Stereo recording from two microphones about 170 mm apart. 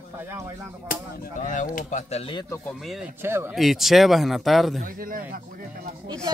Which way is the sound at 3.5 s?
Centre (ahead or behind).